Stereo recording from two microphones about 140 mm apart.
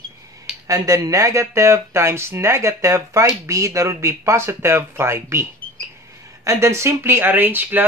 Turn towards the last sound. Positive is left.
turn(degrees=-15)  # may be behind; listen again after turning